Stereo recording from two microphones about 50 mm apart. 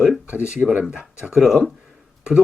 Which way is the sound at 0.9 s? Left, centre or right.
Centre.